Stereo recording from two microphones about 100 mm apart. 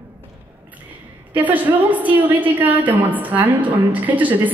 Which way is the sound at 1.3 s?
15° right (ahead or behind).